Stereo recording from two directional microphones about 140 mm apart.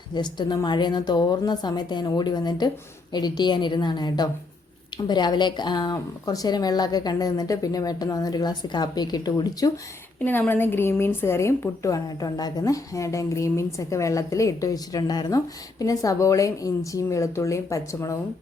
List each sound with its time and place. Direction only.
0.1 s a woman's voice: 30° left (ahead or behind)
10.2 s a woman's voice: 15° left (ahead or behind)